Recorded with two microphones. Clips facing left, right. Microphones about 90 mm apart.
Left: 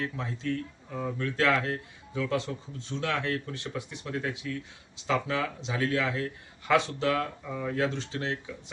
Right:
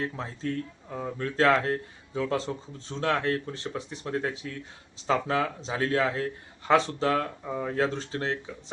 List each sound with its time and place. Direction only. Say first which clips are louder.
0.0 s a man's voice: right 1 dB; 35° right (ahead or behind)